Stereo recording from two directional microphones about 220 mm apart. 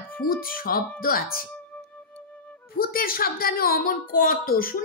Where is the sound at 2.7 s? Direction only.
40° left (ahead or behind).